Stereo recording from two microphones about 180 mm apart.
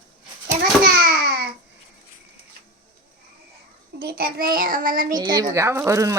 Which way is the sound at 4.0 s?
55° right (ahead or behind).